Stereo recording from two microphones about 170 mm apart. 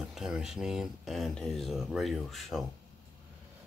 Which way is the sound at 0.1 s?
Centre (ahead or behind).